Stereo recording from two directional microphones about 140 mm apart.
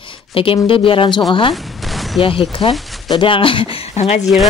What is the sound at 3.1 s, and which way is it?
Speech, 40° left (ahead or behind).